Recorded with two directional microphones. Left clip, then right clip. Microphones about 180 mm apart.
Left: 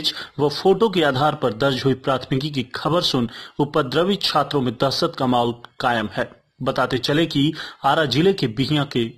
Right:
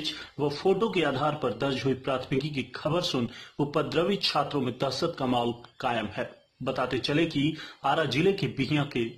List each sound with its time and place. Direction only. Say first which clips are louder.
0.4 s a man's voice: left 9 dB; 40° left (ahead or behind)